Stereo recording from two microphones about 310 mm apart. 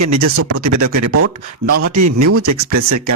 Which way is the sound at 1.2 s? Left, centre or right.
Right.